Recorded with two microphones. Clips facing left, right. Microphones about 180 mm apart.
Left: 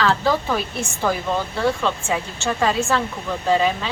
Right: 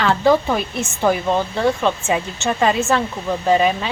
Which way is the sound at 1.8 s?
20° right (ahead or behind).